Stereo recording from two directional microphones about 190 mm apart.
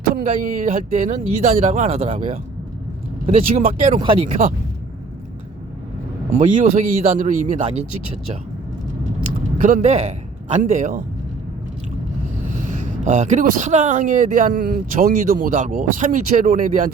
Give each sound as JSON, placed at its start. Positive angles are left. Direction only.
{"t": 0.1, "sound": "speech", "side_deg": -45}
{"t": 3.5, "sound": "speech", "side_deg": -35}
{"t": 6.4, "sound": "speech", "side_deg": -45}
{"t": 9.6, "sound": "a man's voice", "side_deg": -40}
{"t": 12.5, "sound": "speech", "side_deg": -40}